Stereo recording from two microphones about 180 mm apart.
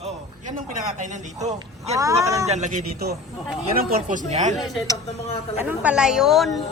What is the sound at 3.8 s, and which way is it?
Speech, 55° right (ahead or behind).